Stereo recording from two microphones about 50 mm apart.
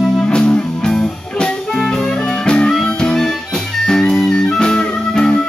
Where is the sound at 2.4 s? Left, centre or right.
Centre.